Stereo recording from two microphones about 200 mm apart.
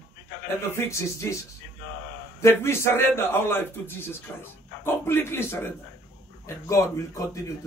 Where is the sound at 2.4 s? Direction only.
15° left (ahead or behind).